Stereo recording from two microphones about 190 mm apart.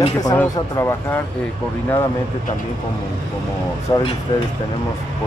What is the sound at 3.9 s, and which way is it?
Speech, 15° left (ahead or behind).